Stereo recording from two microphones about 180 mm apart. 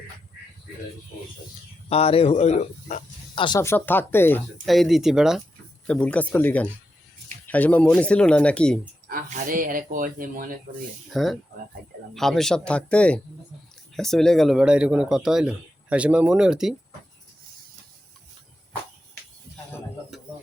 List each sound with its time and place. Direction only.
1.9 s speech: 35° left (ahead or behind)
3.6 s speech: 10° left (ahead or behind)
4.6 s a man's voice: centre (ahead or behind)
9.0 s speech: 45° right (ahead or behind)
11.1 s a man's voice: centre (ahead or behind)